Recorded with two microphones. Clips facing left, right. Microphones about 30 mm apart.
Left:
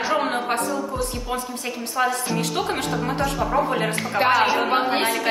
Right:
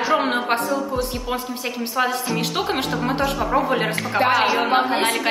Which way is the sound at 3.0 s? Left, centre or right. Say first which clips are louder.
Right 2 dB; centre.